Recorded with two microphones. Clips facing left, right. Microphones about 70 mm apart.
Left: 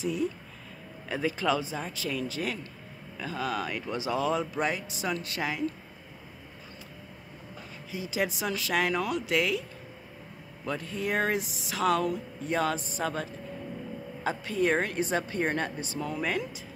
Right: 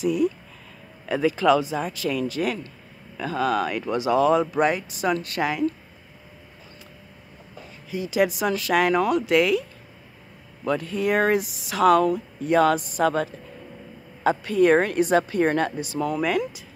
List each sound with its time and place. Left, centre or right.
0.0 s speech: right
1.0 s speech: right
7.9 s speech: right
10.6 s speech: right